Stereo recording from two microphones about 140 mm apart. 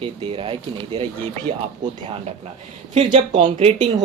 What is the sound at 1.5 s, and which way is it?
Speech, 50° right (ahead or behind).